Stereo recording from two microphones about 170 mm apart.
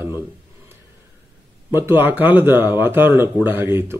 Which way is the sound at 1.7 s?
10° right (ahead or behind).